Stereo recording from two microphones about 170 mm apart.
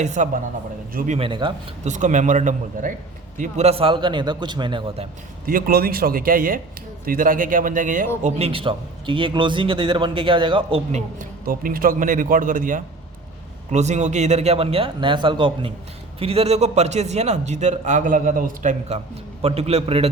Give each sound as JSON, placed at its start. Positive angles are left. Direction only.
{"t": 0.0, "sound": "a man's voice", "side_deg": -45}
{"t": 1.2, "sound": "a man's voice", "side_deg": -30}
{"t": 1.8, "sound": "a man's voice", "side_deg": -45}
{"t": 5.5, "sound": "a man's voice", "side_deg": -55}
{"t": 8.2, "sound": "a man's voice", "side_deg": -35}
{"t": 11.2, "sound": "a man's voice", "side_deg": -55}